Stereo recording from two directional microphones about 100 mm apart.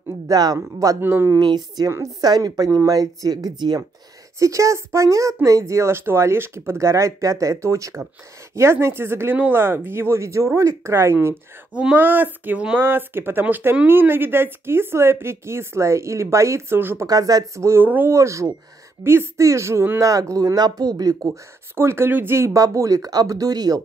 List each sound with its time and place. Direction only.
0.3 s speech: 40° right (ahead or behind)
1.4 s a woman's voice: 45° right (ahead or behind)
1.9 s speech: 35° right (ahead or behind)
4.4 s speech: 30° right (ahead or behind)
11.7 s speech: 15° right (ahead or behind)
17.0 s speech: 35° right (ahead or behind)
21.3 s speech: 25° right (ahead or behind)